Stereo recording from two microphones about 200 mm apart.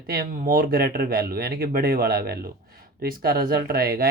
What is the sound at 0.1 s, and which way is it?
Speech, 45° right (ahead or behind).